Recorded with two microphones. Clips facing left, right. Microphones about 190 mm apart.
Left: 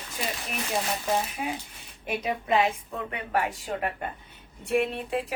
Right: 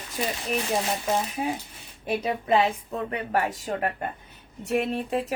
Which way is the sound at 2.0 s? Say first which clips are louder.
Right 3 dB; 35° right (ahead or behind).